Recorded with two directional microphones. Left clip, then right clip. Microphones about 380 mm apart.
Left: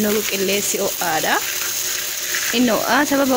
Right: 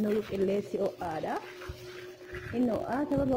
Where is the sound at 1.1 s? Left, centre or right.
Right.